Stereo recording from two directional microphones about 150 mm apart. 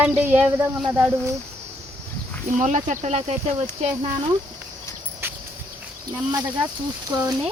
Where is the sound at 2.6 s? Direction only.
55° right (ahead or behind).